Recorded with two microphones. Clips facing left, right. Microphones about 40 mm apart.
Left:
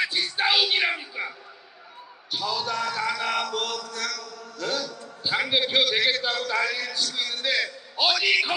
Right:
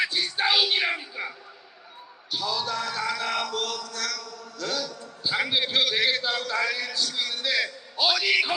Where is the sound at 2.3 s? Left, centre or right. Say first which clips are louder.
Left 1 dB; centre.